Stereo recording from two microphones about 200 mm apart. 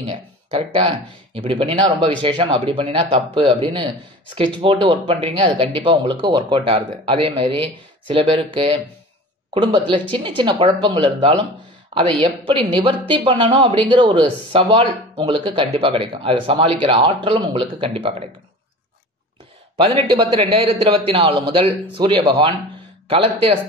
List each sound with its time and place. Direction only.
0.0 s speech: 30° right (ahead or behind)
19.8 s speech: 25° right (ahead or behind)